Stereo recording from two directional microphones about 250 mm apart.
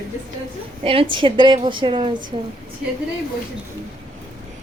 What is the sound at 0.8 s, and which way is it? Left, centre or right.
A woman's voice, right.